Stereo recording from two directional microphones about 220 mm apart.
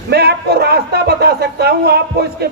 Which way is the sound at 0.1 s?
45° right (ahead or behind).